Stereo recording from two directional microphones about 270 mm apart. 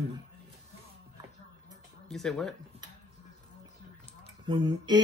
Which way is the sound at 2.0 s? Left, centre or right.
Centre.